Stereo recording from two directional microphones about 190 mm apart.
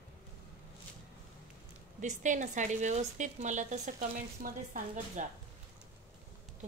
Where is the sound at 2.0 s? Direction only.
40° right (ahead or behind).